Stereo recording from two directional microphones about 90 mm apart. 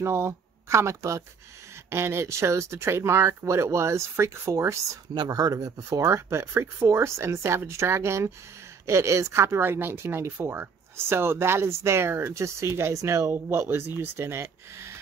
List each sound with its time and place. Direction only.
0.0 s speech: 30° right (ahead or behind)
5.1 s speech: 50° right (ahead or behind); by 15.0 s 30° right (ahead or behind)